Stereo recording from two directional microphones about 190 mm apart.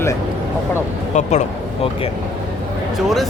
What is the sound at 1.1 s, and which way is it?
Speech, 40° left (ahead or behind).